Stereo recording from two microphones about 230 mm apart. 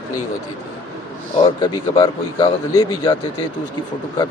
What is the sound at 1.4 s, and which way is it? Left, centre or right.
Speech, left.